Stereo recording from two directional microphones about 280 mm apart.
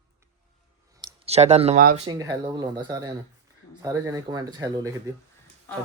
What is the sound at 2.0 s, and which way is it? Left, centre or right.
Speech, centre.